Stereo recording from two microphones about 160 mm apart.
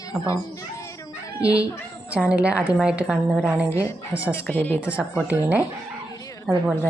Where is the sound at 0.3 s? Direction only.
20° left (ahead or behind).